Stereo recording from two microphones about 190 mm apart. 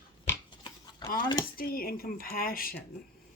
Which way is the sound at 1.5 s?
50° left (ahead or behind).